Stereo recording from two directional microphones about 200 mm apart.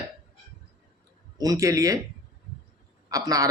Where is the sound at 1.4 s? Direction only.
15° right (ahead or behind).